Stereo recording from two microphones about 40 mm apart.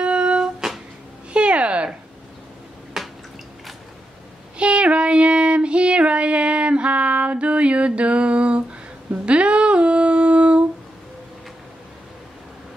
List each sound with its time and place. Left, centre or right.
0.0 s music: right
1.3 s a sound: right
2.9 s drip: centre
4.6 s child singing: right
9.1 s humming: right